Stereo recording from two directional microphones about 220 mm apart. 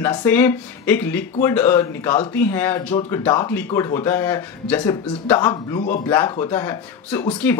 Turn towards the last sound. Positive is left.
turn(degrees=10)  # may be behind; listen again after turning